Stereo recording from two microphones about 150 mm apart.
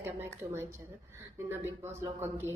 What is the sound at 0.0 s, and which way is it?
A woman's voice, 15° right (ahead or behind).